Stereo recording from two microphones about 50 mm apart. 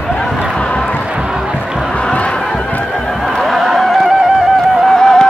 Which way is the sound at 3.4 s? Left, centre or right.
Centre.